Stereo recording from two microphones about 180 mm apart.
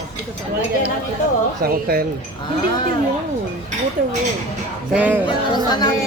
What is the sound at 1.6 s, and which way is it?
Speech, 55° right (ahead or behind).